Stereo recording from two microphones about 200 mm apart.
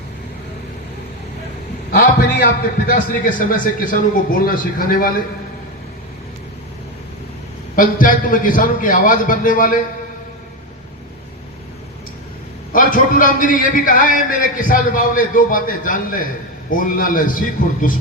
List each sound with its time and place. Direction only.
1.9 s a man's voice: 45° left (ahead or behind)
7.8 s a man's voice: 45° left (ahead or behind)
12.7 s a man's voice: 45° left (ahead or behind)